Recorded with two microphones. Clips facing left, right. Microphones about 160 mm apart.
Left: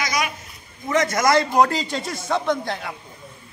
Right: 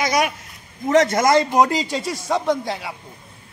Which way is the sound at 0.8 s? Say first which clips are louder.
Right 4 dB; 30° right (ahead or behind).